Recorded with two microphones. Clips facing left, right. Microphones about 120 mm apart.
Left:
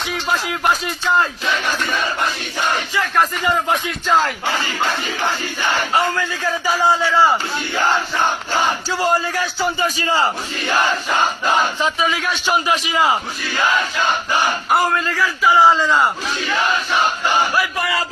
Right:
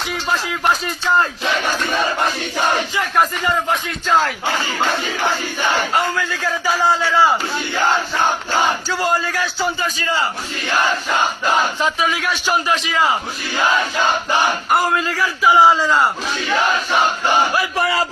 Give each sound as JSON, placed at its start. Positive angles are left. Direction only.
{"t": 0.6, "sound": "speech", "side_deg": 5}
{"t": 4.0, "sound": "speech", "side_deg": 0}
{"t": 5.9, "sound": "speech", "side_deg": 5}
{"t": 8.9, "sound": "a man's voice", "side_deg": 5}
{"t": 11.9, "sound": "speech", "side_deg": -5}
{"t": 12.6, "sound": "a man's voice", "side_deg": 15}
{"t": 14.7, "sound": "speech", "side_deg": 0}
{"t": 14.9, "sound": "speech", "side_deg": -15}
{"t": 15.8, "sound": "speech", "side_deg": 0}
{"t": 17.6, "sound": "battle cry", "side_deg": -30}